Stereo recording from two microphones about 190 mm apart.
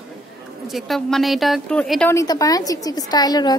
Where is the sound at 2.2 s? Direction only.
20° left (ahead or behind).